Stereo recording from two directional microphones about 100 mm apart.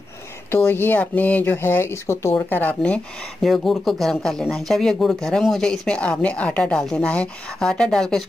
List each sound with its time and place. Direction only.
0.5 s speech: 20° left (ahead or behind)
3.4 s speech: centre (ahead or behind)